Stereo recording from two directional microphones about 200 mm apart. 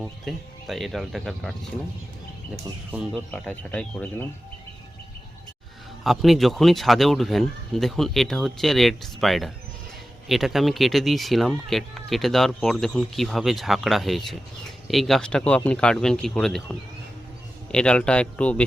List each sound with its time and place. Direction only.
0.3 s speech: centre (ahead or behind)
2.9 s speech: centre (ahead or behind)
6.0 s speech: centre (ahead or behind)